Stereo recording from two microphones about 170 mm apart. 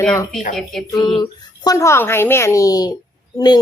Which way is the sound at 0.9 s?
25° left (ahead or behind).